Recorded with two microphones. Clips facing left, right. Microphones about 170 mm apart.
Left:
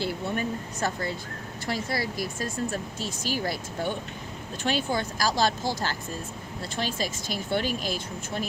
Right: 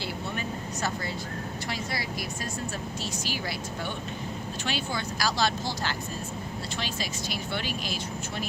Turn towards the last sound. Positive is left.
turn(degrees=45)  # may be behind; listen again after turning